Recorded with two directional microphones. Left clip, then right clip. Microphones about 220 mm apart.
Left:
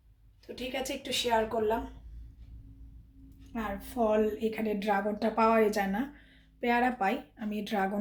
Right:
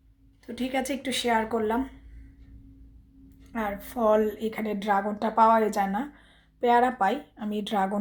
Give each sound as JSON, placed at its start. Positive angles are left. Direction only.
{"t": 0.7, "sound": "a woman's voice", "side_deg": -40}
{"t": 3.5, "sound": "a woman's voice", "side_deg": -35}